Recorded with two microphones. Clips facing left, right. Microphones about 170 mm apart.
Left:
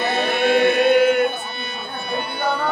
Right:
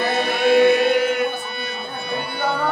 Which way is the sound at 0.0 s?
25° left (ahead or behind).